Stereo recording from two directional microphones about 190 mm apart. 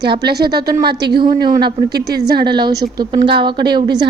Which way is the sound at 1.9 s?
55° right (ahead or behind).